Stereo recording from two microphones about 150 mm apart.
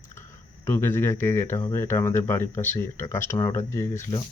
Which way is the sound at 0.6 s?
15° left (ahead or behind).